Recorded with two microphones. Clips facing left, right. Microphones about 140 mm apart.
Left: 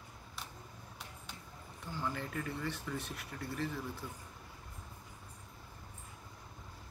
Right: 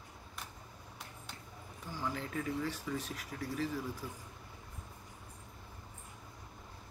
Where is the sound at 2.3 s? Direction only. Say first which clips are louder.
Right 3 dB; 5° right (ahead or behind).